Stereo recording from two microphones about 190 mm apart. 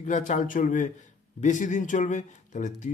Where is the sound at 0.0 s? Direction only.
40° left (ahead or behind).